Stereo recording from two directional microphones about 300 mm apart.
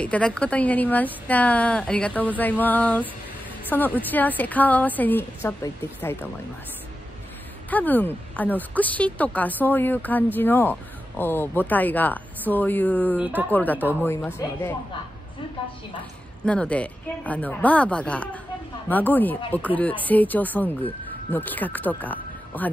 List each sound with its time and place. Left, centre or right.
0.0 s speech: centre
7.7 s speech: centre
13.1 s speech: centre
13.5 s speech: centre
13.7 s speech: centre
14.0 s speech: centre
16.4 s speech: centre